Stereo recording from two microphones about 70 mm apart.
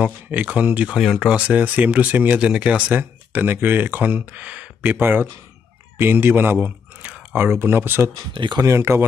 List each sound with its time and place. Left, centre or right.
0.0 s speech: right
0.8 s speech: centre
1.3 s speech: centre
2.3 s speech: centre
3.0 s speech: right